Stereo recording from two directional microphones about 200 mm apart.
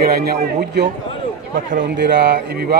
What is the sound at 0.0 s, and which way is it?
Speech, 50° right (ahead or behind).